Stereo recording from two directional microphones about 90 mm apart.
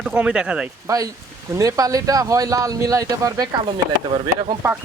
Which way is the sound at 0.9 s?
40° right (ahead or behind).